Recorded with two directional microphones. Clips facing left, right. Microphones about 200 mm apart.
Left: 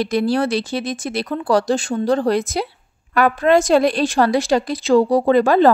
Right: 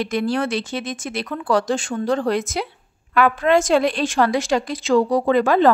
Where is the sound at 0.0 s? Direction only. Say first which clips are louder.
Left 3 dB; 35° left (ahead or behind).